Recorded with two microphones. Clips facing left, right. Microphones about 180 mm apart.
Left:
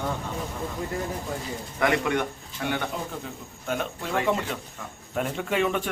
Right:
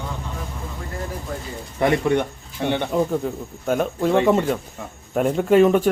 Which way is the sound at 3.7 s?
45° right (ahead or behind).